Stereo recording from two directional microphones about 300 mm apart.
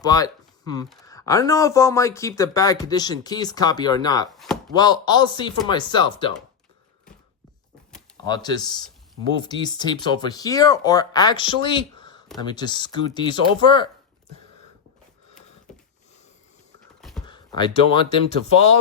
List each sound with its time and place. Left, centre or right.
0.0 s speech: centre
8.3 s speech: centre
17.0 s a sound: centre
17.2 s speech: centre